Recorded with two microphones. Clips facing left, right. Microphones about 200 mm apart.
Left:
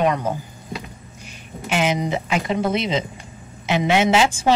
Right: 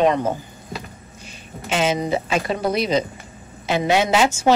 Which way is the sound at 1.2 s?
15° left (ahead or behind).